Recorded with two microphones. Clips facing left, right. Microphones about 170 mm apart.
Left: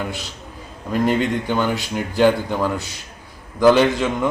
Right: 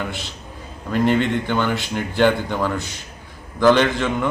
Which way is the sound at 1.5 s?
5° left (ahead or behind).